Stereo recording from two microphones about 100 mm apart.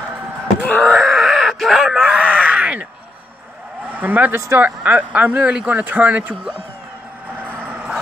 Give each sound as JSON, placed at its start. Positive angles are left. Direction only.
{"t": 0.8, "sound": "groan", "side_deg": -5}
{"t": 3.9, "sound": "speech", "side_deg": -15}
{"t": 4.4, "sound": "speech", "side_deg": -25}
{"t": 4.6, "sound": "speech", "side_deg": -15}
{"t": 7.4, "sound": "vehicle", "side_deg": -15}